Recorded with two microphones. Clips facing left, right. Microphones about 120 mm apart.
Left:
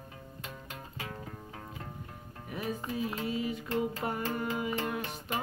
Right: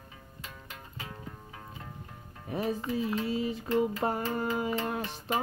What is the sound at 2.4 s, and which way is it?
Speech, 30° right (ahead or behind).